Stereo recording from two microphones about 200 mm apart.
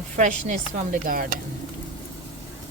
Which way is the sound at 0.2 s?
40° right (ahead or behind).